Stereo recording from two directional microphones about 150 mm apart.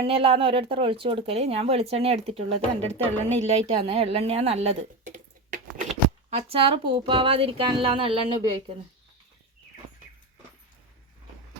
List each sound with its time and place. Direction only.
0.0 s speech: 40° right (ahead or behind); by 5.9 s 60° right (ahead or behind)
6.3 s speech: 40° right (ahead or behind)